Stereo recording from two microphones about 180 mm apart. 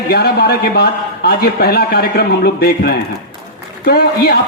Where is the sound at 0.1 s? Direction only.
60° left (ahead or behind).